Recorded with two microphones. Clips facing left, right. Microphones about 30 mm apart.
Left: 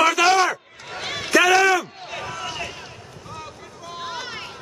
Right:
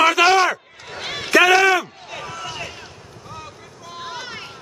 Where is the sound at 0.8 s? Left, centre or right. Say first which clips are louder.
Even; centre.